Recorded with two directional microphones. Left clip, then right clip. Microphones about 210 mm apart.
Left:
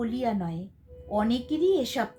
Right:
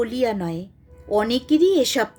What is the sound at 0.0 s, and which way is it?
Speech, 50° right (ahead or behind).